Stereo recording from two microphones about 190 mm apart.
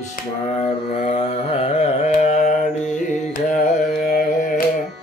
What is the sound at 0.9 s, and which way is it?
Carnatic music, 30° left (ahead or behind).